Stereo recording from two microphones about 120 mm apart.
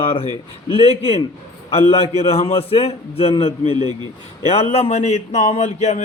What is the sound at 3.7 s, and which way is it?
Speech, 35° right (ahead or behind).